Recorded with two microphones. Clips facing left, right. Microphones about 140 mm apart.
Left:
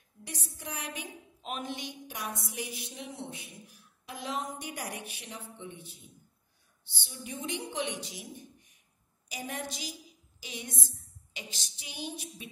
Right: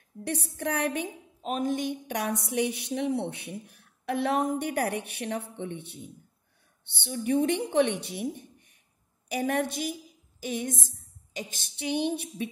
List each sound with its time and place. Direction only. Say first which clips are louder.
0.2 s a woman's voice: right 12 dB; 60° right (ahead or behind)
1.4 s a woman's voice: right 10 dB; 40° right (ahead or behind); by 9.9 s 55° right (ahead or behind)
10.4 s a sound: right 11 dB; 50° right (ahead or behind)
11.3 s a woman's voice: right 8 dB; 55° right (ahead or behind)